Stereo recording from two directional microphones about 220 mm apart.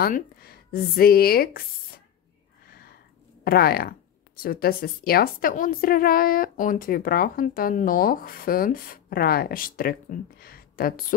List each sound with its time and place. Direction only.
0.0 s speech: 45° left (ahead or behind)
2.7 s a sound: 45° left (ahead or behind)
3.4 s a woman's voice: 45° left (ahead or behind)